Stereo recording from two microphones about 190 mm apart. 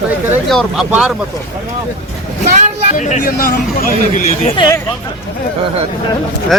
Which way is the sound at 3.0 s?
40° left (ahead or behind).